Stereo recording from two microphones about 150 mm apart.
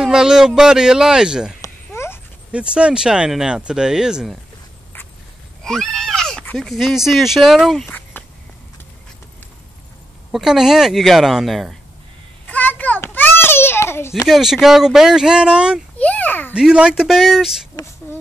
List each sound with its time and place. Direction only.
0.0 s speech: 5° right (ahead or behind)
1.6 s a sound: 15° left (ahead or behind)
2.7 s speech: 5° right (ahead or behind)
5.6 s speech: 5° left (ahead or behind)
8.2 s walk: 15° left (ahead or behind)
10.3 s speech: 5° right (ahead or behind)
12.4 s a sound: 10° left (ahead or behind)
14.2 s speech: centre (ahead or behind)
16.0 s a child's voice: 10° left (ahead or behind)
16.5 s speech: 5° right (ahead or behind)
17.8 s speech: 30° left (ahead or behind)